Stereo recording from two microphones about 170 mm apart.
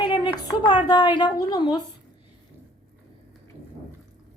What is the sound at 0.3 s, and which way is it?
A woman's voice, 25° left (ahead or behind).